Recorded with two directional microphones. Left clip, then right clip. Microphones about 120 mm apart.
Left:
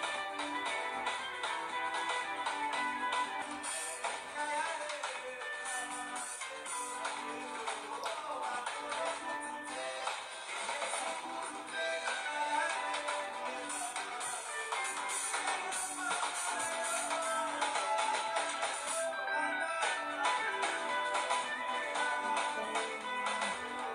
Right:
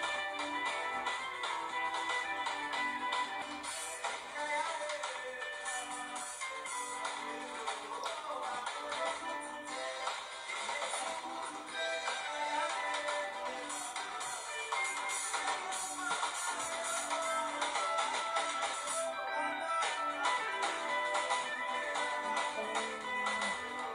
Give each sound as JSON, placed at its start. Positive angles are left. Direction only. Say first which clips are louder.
{"t": 0.0, "sound": "music", "louder": "right 1 dB", "side_deg": 35}
{"t": 4.4, "sound": "music", "louder": "even", "side_deg": 35}
{"t": 11.8, "sound": "music", "louder": "left 1 dB", "side_deg": 35}
{"t": 15.3, "sound": "music", "louder": "left 2 dB", "side_deg": 35}